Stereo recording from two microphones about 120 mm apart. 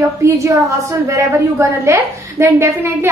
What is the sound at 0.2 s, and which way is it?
A woman's voice, 25° right (ahead or behind).